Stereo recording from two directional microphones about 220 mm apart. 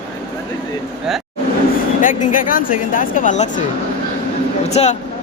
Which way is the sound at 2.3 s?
40° left (ahead or behind).